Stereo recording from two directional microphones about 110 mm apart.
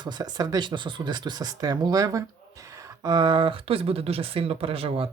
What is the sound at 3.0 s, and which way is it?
Speech, 40° right (ahead or behind).